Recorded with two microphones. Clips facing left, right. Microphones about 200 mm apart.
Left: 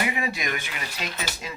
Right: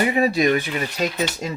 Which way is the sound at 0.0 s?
40° right (ahead or behind).